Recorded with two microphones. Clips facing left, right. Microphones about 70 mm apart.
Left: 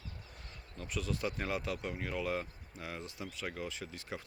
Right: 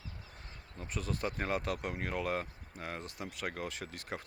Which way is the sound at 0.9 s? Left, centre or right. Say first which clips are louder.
Even; right.